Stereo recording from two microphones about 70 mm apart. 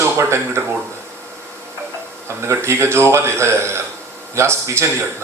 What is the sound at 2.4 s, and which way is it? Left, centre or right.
A man's voice, right.